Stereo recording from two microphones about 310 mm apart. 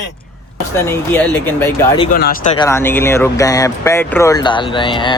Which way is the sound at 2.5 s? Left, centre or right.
Centre.